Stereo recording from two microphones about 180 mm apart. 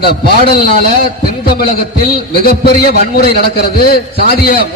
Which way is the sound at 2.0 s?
60° left (ahead or behind).